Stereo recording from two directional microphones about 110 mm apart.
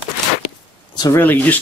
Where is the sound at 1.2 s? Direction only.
15° left (ahead or behind).